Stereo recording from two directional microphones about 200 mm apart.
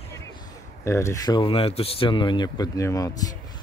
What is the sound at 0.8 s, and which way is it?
Speech, 15° left (ahead or behind).